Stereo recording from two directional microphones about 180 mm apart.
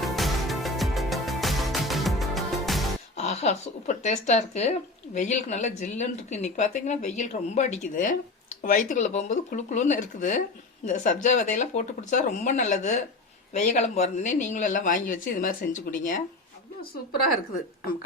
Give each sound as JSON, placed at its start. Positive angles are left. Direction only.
{"t": 0.0, "sound": "music", "side_deg": 0}
{"t": 3.2, "sound": "a woman's voice", "side_deg": 40}